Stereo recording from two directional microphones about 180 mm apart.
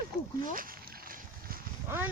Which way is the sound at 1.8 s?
10° right (ahead or behind).